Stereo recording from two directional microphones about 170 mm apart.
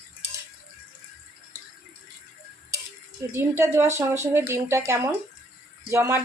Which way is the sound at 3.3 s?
15° right (ahead or behind).